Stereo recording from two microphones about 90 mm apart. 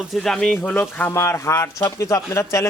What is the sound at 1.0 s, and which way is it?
Speech, 25° left (ahead or behind).